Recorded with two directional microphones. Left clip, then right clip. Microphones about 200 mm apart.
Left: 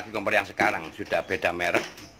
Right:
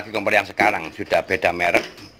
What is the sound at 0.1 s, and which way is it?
Speech, 15° right (ahead or behind).